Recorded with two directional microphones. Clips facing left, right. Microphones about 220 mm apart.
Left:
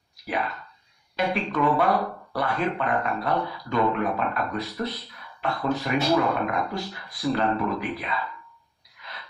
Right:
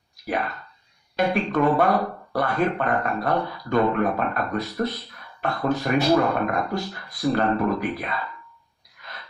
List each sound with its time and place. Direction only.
1.1 s speech: 45° right (ahead or behind)